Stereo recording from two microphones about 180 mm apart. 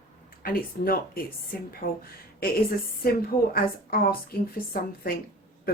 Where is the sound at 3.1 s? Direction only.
55° left (ahead or behind).